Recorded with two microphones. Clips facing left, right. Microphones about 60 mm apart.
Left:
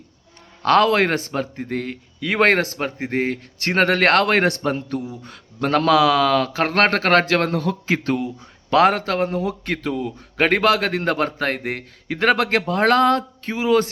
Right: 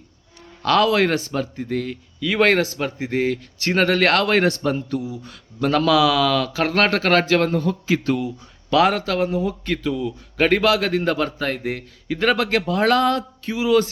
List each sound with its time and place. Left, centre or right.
0.6 s a man's voice: left
7.9 s a man's voice: left